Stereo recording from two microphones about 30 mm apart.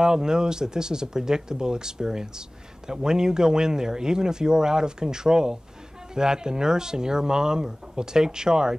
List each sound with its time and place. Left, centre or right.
0.0 s speech: right